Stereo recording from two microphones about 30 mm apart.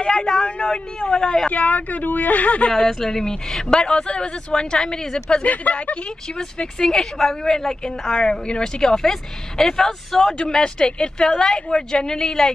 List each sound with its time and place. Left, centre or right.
0.0 s a woman's voice: left
1.5 s speech: left
2.9 s a woman's voice: centre
5.4 s speech: left
6.3 s a woman's voice: left
8.8 s speech: centre
10.5 s a woman's voice: left